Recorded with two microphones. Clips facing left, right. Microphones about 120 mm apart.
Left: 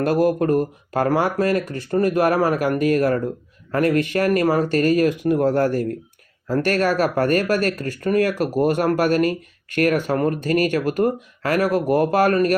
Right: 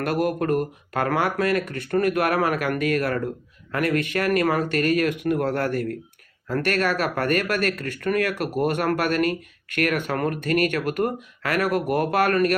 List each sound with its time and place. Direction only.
0.0 s speech: 30° left (ahead or behind)